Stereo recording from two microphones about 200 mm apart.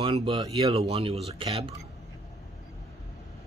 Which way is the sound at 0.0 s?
25° right (ahead or behind).